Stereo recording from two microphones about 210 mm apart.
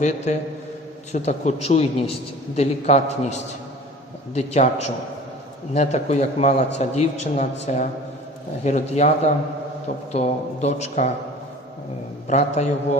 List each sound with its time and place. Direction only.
0.3 s a man's voice: 35° left (ahead or behind)
12.3 s a man's voice: 35° left (ahead or behind)